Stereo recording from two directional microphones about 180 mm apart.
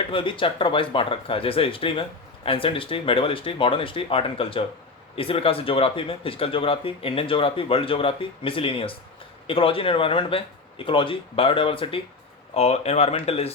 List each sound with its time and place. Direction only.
0.1 s speech: 30° left (ahead or behind)